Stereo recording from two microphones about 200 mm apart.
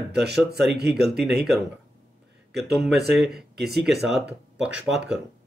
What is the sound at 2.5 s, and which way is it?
A man's voice, centre (ahead or behind).